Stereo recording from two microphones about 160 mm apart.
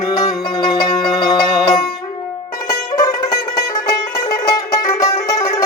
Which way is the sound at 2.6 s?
20° left (ahead or behind).